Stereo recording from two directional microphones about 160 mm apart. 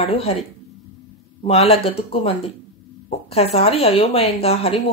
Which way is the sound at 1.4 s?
40° left (ahead or behind).